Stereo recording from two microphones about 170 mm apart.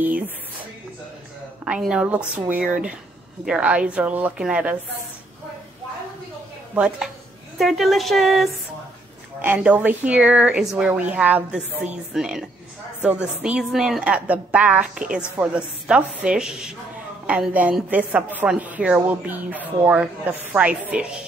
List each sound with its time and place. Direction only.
1.6 s a woman's voice: 5° right (ahead or behind)
6.7 s a woman's voice: 5° right (ahead or behind)